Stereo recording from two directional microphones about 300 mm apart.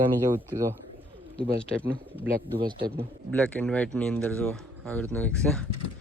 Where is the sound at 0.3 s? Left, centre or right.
Centre.